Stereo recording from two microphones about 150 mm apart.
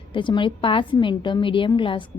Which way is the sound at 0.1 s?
30° left (ahead or behind).